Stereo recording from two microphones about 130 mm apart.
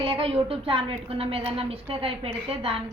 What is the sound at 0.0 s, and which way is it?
A woman's voice, 45° right (ahead or behind).